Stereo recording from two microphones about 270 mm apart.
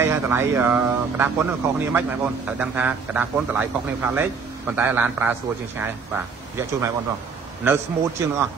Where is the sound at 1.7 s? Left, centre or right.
Centre.